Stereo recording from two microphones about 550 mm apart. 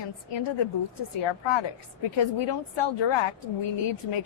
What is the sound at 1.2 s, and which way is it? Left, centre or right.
A woman's voice, left.